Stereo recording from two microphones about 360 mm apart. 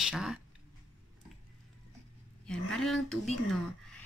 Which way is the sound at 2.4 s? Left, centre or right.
Centre.